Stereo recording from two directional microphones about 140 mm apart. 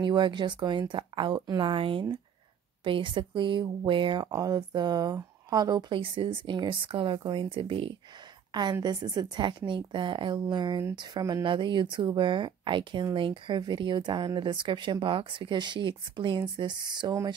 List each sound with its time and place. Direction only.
0.0 s speech: 35° right (ahead or behind)